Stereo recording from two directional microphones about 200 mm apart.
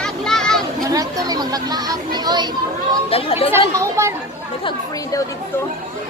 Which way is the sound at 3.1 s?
30° left (ahead or behind).